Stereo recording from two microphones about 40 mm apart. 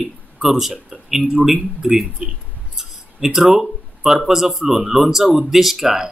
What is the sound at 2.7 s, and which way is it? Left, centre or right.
Speech, centre.